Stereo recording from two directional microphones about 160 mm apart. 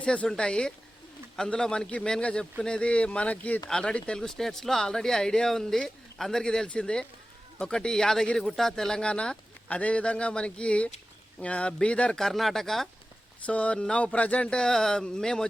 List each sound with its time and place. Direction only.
0.0 s a man's voice: 5° left (ahead or behind)